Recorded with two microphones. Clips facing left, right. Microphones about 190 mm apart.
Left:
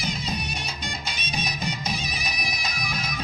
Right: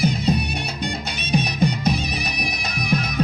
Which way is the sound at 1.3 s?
60° right (ahead or behind).